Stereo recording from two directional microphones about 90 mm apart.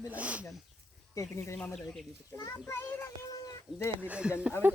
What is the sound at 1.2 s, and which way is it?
Speech, 30° left (ahead or behind).